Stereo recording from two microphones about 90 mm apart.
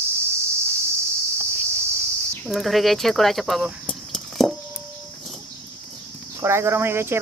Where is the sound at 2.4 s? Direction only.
Centre (ahead or behind).